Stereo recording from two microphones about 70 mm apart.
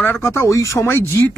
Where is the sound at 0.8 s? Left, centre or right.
Left.